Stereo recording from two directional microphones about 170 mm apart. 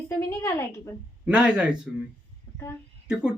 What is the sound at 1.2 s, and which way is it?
Speech, 5° right (ahead or behind).